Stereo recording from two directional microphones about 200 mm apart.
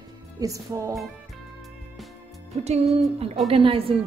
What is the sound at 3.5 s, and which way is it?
Speech, 25° right (ahead or behind).